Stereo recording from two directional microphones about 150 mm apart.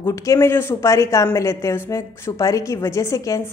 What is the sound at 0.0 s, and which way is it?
A woman's voice, 20° left (ahead or behind).